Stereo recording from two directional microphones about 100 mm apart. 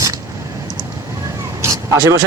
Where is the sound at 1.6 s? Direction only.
30° right (ahead or behind).